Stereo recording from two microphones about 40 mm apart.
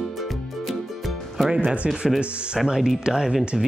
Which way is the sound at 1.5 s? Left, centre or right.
Right.